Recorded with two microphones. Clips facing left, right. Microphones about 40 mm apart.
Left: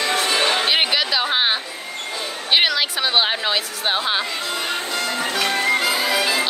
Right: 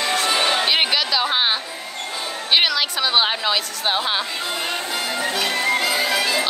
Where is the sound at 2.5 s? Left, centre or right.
Centre.